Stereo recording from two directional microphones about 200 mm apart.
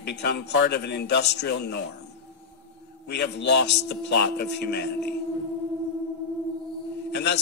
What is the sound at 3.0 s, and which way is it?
Speech, 55° left (ahead or behind).